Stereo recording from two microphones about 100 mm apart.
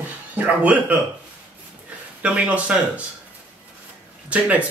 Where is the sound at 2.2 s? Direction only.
15° right (ahead or behind).